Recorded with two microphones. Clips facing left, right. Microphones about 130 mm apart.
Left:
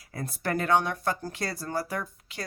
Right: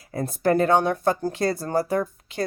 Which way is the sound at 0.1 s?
25° right (ahead or behind).